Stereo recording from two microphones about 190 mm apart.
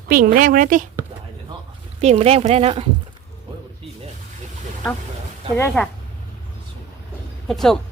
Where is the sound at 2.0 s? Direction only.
35° right (ahead or behind).